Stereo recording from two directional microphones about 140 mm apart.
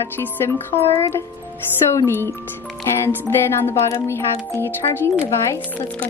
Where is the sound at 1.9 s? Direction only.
20° left (ahead or behind).